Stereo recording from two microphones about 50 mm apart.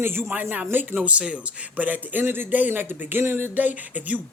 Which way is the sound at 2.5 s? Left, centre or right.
Right.